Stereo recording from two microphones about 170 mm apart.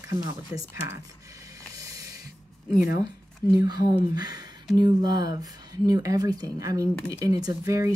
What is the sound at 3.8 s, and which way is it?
Speech, 25° right (ahead or behind).